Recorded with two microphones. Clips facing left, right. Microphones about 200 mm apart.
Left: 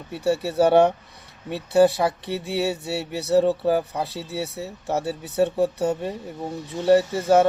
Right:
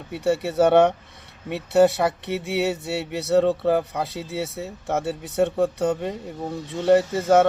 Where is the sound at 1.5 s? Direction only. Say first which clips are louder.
Even; 65° right (ahead or behind).